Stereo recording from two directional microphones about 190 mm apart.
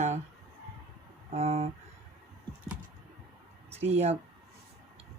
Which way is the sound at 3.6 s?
35° right (ahead or behind).